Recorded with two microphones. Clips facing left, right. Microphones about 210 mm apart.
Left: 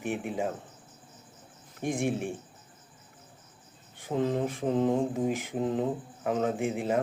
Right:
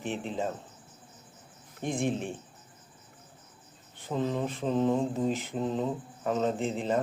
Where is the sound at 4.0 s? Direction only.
15° left (ahead or behind).